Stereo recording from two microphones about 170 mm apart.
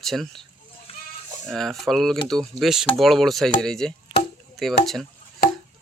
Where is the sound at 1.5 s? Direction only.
Centre (ahead or behind).